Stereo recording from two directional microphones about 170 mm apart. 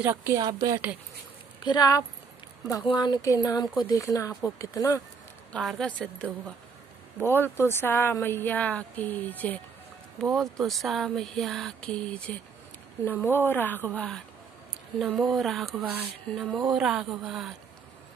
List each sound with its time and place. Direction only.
0.0 s speech: 15° right (ahead or behind)
0.4 s a woman's voice: 25° right (ahead or behind)
1.6 s speech: 25° left (ahead or behind)
5.5 s speech: centre (ahead or behind)
7.2 s speech: 10° left (ahead or behind)